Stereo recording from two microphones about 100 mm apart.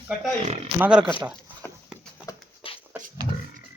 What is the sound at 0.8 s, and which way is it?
Speech, 10° right (ahead or behind).